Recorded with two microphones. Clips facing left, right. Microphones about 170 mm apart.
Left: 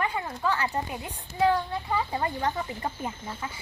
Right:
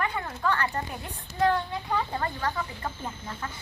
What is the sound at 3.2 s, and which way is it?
Speech, 10° left (ahead or behind).